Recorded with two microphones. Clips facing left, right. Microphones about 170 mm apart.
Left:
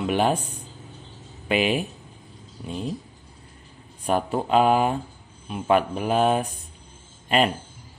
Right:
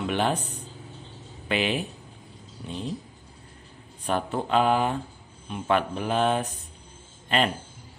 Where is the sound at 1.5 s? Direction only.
10° left (ahead or behind).